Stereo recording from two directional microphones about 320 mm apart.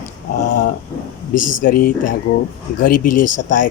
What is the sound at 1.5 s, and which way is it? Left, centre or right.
Speech, left.